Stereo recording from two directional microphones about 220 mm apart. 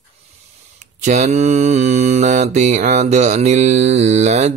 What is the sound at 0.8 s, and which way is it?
Mantra, 35° right (ahead or behind).